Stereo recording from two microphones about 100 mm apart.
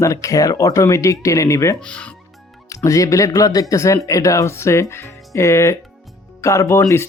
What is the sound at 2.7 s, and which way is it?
Speech, 35° left (ahead or behind).